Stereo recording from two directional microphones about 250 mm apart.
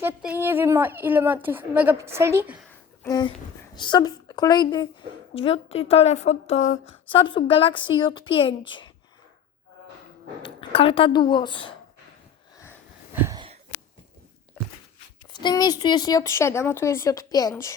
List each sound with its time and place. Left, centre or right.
0.0 s a woman's voice: centre
3.0 s a woman's voice: centre
10.4 s a woman's voice: left
13.1 s a sound: centre
15.3 s speech: centre